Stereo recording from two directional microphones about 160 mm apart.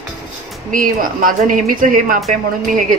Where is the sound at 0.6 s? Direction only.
60° right (ahead or behind).